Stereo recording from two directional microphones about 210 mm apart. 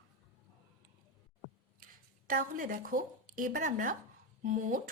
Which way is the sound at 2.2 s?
40° right (ahead or behind).